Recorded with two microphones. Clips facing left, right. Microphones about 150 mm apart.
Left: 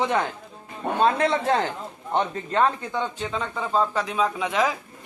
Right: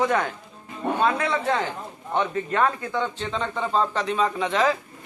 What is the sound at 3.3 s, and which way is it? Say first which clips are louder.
Speech: right 1 dB; 5° left (ahead or behind).